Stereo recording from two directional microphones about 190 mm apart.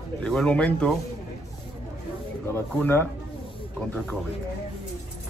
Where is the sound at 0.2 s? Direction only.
5° left (ahead or behind).